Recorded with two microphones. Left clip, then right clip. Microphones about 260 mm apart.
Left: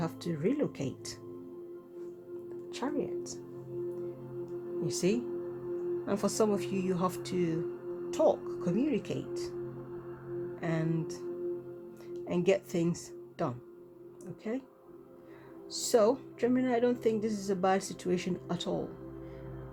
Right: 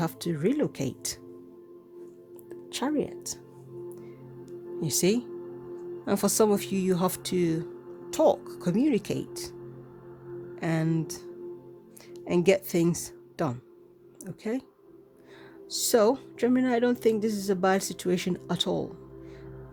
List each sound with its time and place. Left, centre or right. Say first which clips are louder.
0.0 s speech: right 5 dB; right
2.6 s speech: right 6 dB; right
4.8 s speech: right 5 dB; right
10.5 s speech: right 6 dB; right
15.7 s speech: right 4 dB; right